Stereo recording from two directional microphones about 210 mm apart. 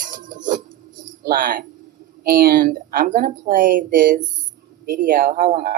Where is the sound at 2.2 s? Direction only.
45° right (ahead or behind).